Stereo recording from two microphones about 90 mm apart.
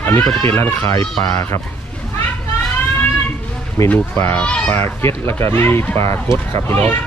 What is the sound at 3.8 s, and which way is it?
Speech, 30° left (ahead or behind).